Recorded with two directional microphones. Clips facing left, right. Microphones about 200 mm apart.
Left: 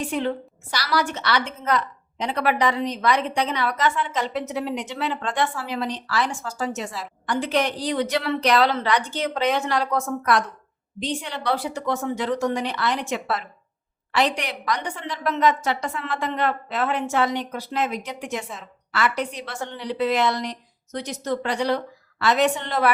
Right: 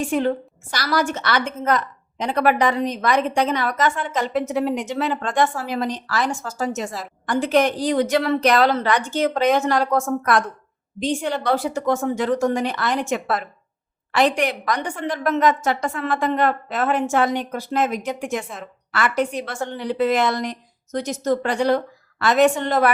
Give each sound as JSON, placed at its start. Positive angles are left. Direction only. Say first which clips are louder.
{"t": 0.1, "sound": "a woman's voice", "louder": "right 4 dB", "side_deg": -45}